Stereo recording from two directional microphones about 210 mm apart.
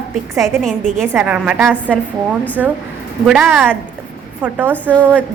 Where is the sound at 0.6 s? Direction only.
Centre (ahead or behind).